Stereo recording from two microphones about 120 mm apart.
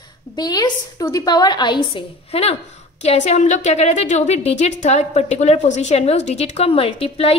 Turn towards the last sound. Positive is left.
turn(degrees=50)  # may be behind; listen again after turning